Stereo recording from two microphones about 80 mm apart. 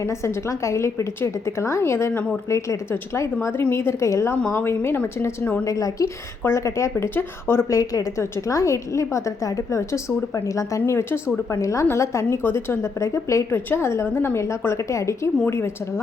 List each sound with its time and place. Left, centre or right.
0.0 s a woman's voice: left
5.6 s a woman's voice: left
7.7 s a woman's voice: left